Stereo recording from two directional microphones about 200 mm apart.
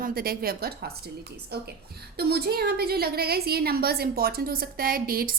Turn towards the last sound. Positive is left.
turn(degrees=-45)  # may be behind; listen again after turning